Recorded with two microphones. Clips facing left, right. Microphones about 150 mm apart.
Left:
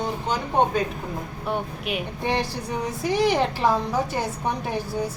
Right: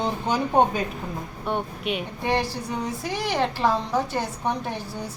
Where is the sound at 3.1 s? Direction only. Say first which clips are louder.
Left 6 dB; 15° left (ahead or behind).